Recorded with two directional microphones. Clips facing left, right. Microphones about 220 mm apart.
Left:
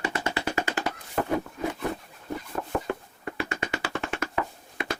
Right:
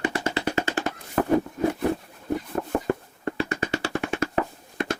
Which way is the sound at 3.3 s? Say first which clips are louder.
Right 4 dB; 30° right (ahead or behind).